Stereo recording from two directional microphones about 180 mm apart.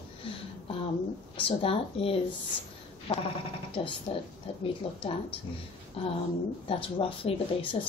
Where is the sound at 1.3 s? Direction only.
30° left (ahead or behind).